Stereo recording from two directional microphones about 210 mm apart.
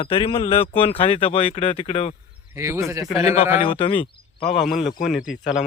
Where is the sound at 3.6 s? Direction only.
25° left (ahead or behind).